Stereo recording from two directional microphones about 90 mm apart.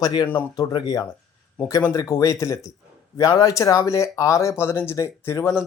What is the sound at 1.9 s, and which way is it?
A man's voice, 30° left (ahead or behind).